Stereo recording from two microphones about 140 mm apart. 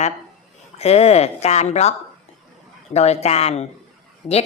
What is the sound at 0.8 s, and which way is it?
Speech, 50° left (ahead or behind).